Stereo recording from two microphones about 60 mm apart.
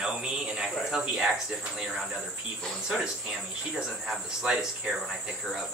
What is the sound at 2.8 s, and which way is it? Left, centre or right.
Speech, centre.